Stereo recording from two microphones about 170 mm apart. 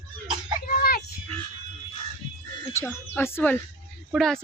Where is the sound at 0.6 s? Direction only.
60° left (ahead or behind).